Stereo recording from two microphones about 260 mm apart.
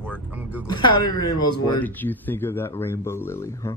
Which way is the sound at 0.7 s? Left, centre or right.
Centre.